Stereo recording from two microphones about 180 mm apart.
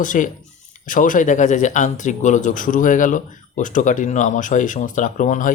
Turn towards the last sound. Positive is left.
turn(degrees=45)  # may be behind; listen again after turning